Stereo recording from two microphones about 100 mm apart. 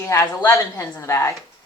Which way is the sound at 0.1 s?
30° left (ahead or behind).